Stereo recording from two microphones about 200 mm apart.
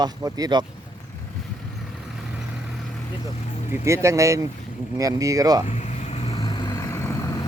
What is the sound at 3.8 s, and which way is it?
Speech, 15° right (ahead or behind).